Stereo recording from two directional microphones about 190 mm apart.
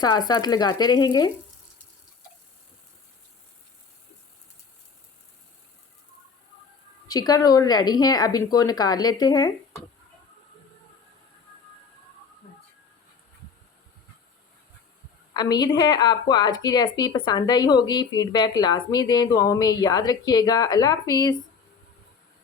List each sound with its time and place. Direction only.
0.0 s a woman's voice: 20° left (ahead or behind)
7.1 s a woman's voice: 20° left (ahead or behind)
15.3 s a woman's voice: 20° left (ahead or behind)